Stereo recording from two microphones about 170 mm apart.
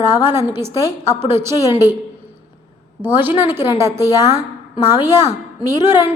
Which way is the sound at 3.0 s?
10° right (ahead or behind).